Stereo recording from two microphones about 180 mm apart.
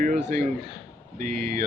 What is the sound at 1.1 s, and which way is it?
Speech, 45° right (ahead or behind).